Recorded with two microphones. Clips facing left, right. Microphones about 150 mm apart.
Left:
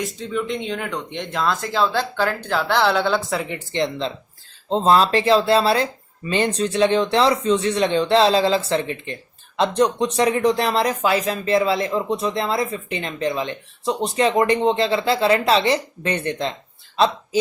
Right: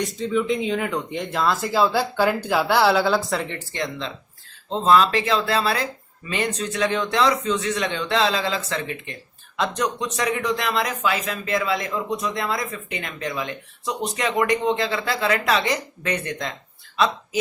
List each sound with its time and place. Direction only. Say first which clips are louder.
0.0 s speech: right 2 dB; centre (ahead or behind)
3.5 s speech: left 5 dB; 20° left (ahead or behind)